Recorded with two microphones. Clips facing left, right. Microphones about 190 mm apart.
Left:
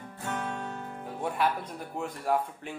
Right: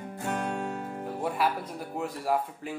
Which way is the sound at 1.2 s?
5° right (ahead or behind).